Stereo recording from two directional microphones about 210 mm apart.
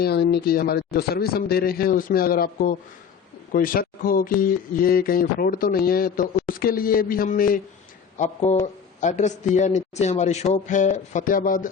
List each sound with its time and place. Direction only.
0.0 s a man's voice: 50° left (ahead or behind)